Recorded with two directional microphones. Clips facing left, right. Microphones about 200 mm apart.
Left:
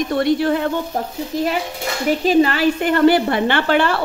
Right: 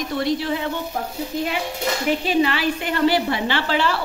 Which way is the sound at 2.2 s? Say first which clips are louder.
Left 8 dB; 40° left (ahead or behind).